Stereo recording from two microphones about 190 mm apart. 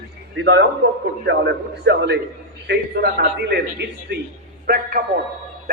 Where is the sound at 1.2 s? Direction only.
65° right (ahead or behind).